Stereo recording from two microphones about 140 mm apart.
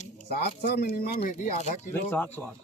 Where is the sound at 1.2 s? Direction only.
55° left (ahead or behind).